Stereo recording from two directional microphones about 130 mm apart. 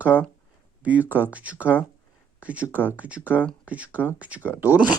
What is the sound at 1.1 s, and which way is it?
Speech, 10° right (ahead or behind).